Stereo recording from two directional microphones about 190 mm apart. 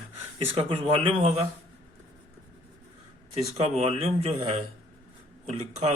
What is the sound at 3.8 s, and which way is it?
Speech, 35° right (ahead or behind).